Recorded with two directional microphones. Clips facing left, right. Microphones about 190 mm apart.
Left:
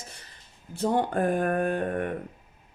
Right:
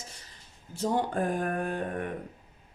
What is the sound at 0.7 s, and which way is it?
Speech, 60° left (ahead or behind).